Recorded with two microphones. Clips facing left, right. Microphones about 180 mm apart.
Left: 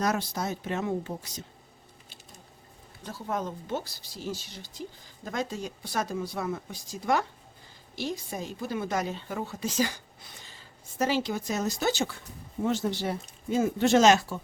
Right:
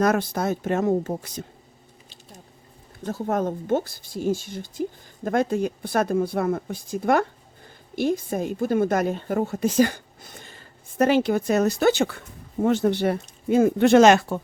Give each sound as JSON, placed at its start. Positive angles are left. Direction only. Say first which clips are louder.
{"t": 0.0, "sound": "speech", "louder": "right 7 dB", "side_deg": -55}
{"t": 3.0, "sound": "a woman's voice", "louder": "right 8 dB", "side_deg": -50}